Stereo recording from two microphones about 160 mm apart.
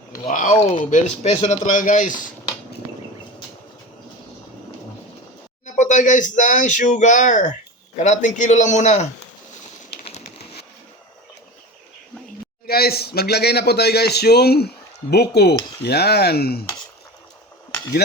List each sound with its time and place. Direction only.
0.3 s speech: 55° left (ahead or behind)
5.6 s speech: 50° left (ahead or behind)
9.9 s a sound: 45° left (ahead or behind)
12.6 s speech: 75° left (ahead or behind)